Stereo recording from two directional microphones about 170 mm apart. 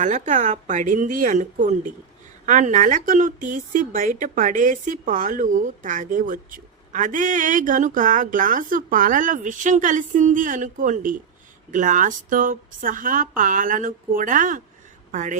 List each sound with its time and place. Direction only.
0.0 s a woman's voice: 45° right (ahead or behind)